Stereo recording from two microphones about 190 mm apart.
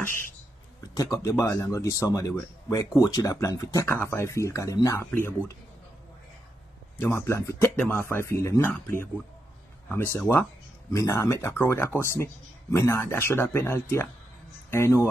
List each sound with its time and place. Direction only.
0.9 s speech: 15° left (ahead or behind)
7.0 s speech: 15° left (ahead or behind)